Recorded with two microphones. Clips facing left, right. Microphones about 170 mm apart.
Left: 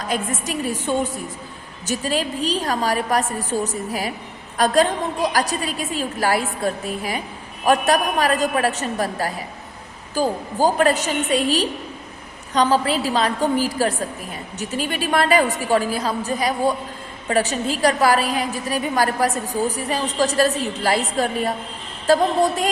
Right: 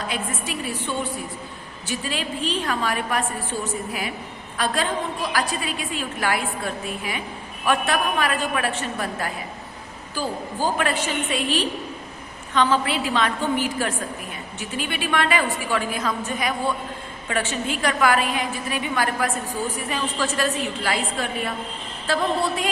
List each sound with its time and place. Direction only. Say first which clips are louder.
0.1 s a woman's voice: left 4 dB; 45° left (ahead or behind)